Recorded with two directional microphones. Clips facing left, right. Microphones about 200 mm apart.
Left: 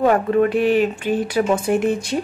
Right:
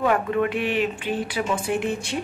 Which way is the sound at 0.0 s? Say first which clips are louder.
Left 6 dB; 40° left (ahead or behind).